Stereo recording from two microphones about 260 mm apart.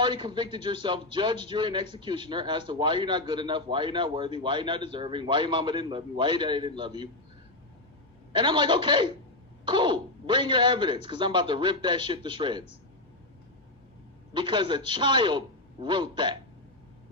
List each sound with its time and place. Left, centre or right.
0.0 s speech: centre
8.3 s speech: centre
14.3 s speech: centre